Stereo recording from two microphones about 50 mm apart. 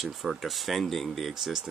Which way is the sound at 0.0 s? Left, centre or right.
Centre.